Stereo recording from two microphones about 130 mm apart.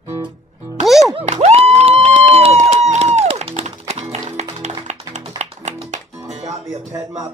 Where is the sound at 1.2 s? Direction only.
60° right (ahead or behind).